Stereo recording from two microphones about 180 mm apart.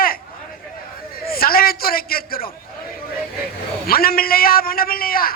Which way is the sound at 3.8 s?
55° left (ahead or behind).